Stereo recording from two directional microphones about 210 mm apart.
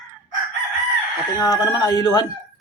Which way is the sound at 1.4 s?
20° left (ahead or behind).